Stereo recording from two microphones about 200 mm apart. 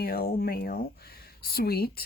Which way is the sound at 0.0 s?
50° left (ahead or behind).